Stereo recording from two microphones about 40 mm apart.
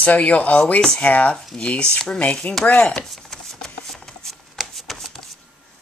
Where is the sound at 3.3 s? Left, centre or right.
Centre.